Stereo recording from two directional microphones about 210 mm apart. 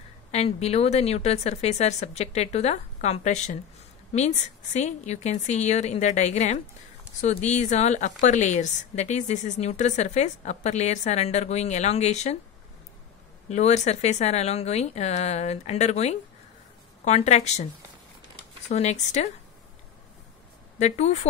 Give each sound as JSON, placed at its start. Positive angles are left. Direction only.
{"t": 0.3, "sound": "a woman's voice", "side_deg": 30}
{"t": 13.5, "sound": "a woman's voice", "side_deg": 30}
{"t": 18.7, "sound": "a woman's voice", "side_deg": 35}
{"t": 20.8, "sound": "a woman's voice", "side_deg": 35}